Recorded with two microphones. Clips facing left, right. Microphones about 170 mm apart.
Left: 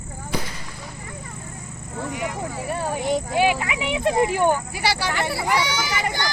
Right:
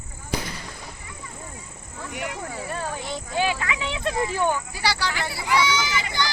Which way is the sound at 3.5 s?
20° left (ahead or behind).